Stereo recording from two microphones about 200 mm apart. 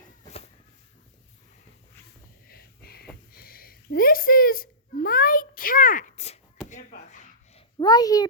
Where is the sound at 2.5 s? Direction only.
50° left (ahead or behind).